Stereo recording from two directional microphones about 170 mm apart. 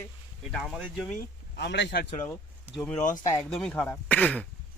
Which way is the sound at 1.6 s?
85° left.